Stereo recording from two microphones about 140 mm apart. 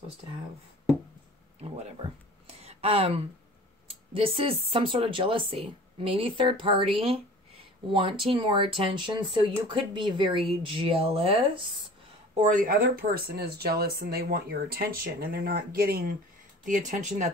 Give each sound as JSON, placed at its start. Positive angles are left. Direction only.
{"t": 1.6, "sound": "speech", "side_deg": -50}
{"t": 2.5, "sound": "a sound", "side_deg": -45}
{"t": 3.8, "sound": "speech", "side_deg": -40}
{"t": 12.4, "sound": "speech", "side_deg": -75}
{"t": 13.0, "sound": "speech", "side_deg": -90}
{"t": 16.6, "sound": "speech", "side_deg": -65}